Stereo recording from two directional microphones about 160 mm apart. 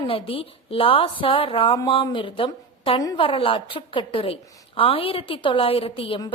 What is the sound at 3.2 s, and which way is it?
A woman's voice, 35° left (ahead or behind).